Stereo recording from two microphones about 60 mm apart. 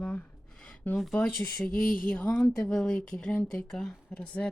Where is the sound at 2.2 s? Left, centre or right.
Left.